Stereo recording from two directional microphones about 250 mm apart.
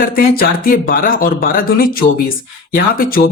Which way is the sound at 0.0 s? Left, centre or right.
Left.